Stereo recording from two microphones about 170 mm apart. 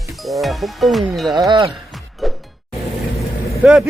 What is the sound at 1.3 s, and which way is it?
Speech, 25° right (ahead or behind).